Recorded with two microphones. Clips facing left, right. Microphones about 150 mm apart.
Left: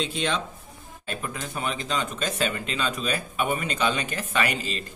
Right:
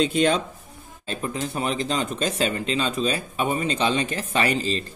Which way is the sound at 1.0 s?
30° right (ahead or behind).